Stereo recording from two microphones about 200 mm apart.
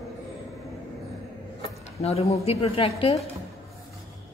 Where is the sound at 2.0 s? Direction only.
30° left (ahead or behind).